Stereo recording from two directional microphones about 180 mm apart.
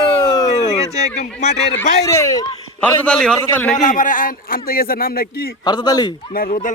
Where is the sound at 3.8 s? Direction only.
45° left (ahead or behind).